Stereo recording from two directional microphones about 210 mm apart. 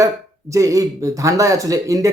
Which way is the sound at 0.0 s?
15° right (ahead or behind).